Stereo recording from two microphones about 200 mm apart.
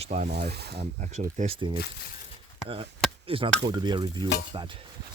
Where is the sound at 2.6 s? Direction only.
25° right (ahead or behind).